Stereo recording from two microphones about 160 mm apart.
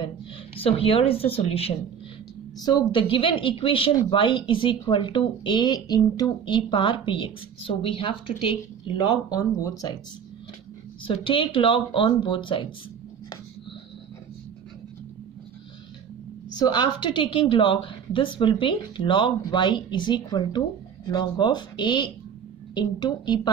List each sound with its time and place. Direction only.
0.6 s speech: 35° left (ahead or behind)
2.6 s speech: 25° left (ahead or behind)
11.1 s speech: 35° left (ahead or behind)
16.5 s a woman's voice: 25° left (ahead or behind)